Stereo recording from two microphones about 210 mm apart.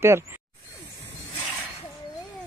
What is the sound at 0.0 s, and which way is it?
Speech, 10° right (ahead or behind).